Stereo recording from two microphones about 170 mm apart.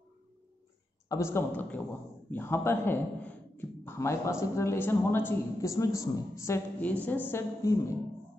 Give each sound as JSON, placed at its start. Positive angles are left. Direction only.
{"t": 1.0, "sound": "a man's voice", "side_deg": 20}